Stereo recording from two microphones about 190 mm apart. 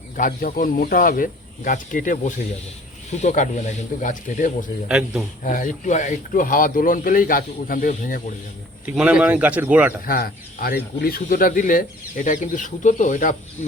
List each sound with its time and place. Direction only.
0.2 s speech: 45° left (ahead or behind)
4.9 s a man's voice: 5° right (ahead or behind)
5.4 s speech: 40° left (ahead or behind)
8.9 s speech: 5° right (ahead or behind)
10.1 s speech: 50° left (ahead or behind)